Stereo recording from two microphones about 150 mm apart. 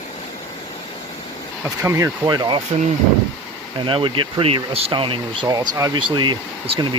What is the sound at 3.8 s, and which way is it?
Speech, 35° right (ahead or behind).